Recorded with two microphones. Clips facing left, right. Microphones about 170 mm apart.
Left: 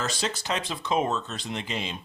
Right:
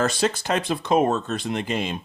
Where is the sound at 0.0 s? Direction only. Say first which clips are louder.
Right 8 dB; 55° right (ahead or behind).